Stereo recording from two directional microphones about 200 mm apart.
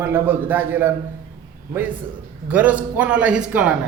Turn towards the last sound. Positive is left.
turn(degrees=-5)  # may be behind; listen again after turning